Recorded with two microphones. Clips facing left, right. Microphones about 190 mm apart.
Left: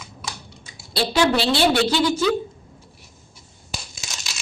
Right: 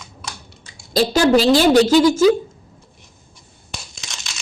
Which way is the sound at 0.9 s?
40° right (ahead or behind).